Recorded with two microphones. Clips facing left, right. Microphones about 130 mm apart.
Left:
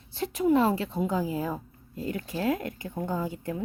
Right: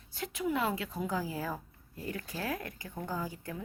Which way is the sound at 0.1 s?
35° left (ahead or behind).